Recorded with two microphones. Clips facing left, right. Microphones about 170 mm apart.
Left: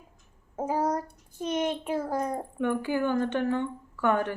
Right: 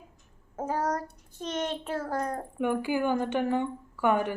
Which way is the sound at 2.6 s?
10° right (ahead or behind).